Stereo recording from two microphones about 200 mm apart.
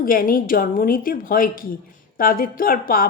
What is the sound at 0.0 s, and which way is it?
A woman's voice, 45° left (ahead or behind).